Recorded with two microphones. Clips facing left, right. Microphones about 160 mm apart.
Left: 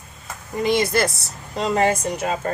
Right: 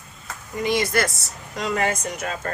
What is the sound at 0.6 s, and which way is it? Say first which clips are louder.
A woman's voice: left 3 dB; 30° left (ahead or behind).